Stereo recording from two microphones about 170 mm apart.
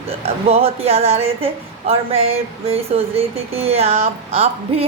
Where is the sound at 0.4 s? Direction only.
35° right (ahead or behind).